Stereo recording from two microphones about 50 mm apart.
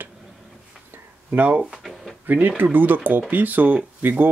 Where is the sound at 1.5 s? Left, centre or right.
Right.